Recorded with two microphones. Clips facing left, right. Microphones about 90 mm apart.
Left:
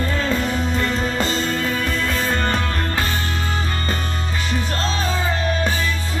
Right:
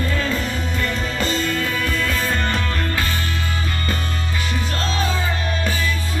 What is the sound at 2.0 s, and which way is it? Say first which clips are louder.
Music: left 1 dB; 35° left (ahead or behind).